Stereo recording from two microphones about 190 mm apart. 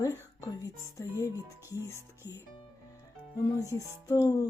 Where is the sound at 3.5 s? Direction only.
20° left (ahead or behind).